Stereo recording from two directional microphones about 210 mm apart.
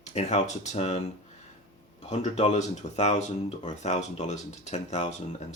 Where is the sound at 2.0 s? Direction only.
30° left (ahead or behind).